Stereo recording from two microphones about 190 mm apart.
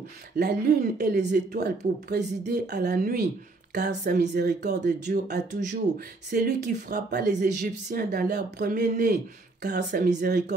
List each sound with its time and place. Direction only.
0.4 s speech: 60° right (ahead or behind)
7.3 s speech: 45° right (ahead or behind)